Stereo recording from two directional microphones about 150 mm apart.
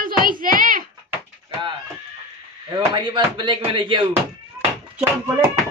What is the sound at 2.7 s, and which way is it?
Speech, 30° right (ahead or behind).